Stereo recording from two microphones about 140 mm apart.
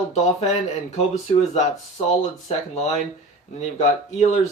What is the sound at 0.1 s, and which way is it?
Speech, 50° left (ahead or behind).